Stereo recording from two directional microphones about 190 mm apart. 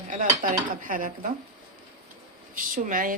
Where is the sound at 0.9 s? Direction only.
45° right (ahead or behind).